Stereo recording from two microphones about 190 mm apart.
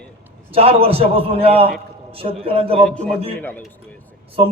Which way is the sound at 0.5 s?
30° right (ahead or behind).